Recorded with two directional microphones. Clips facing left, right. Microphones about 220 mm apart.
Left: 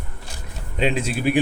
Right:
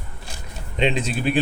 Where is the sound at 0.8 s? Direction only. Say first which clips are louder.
Even; 5° left (ahead or behind).